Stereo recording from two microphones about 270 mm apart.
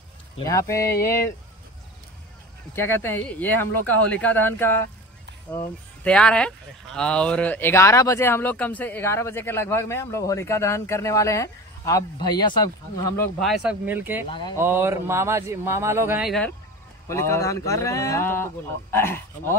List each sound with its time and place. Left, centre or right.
0.4 s speech: centre
2.7 s speech: centre
14.3 s speech: centre
14.6 s speech: centre